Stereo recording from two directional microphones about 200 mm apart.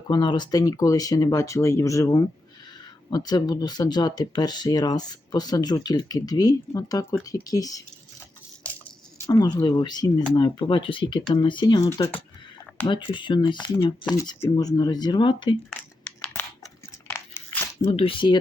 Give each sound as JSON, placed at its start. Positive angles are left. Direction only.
{"t": 0.1, "sound": "speech", "side_deg": 20}
{"t": 9.2, "sound": "speech", "side_deg": 20}
{"t": 16.0, "sound": "a sound", "side_deg": 10}
{"t": 17.1, "sound": "biting", "side_deg": 10}
{"t": 17.8, "sound": "speech", "side_deg": 30}